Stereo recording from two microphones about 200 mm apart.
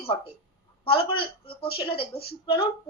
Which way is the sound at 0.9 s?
25° left (ahead or behind).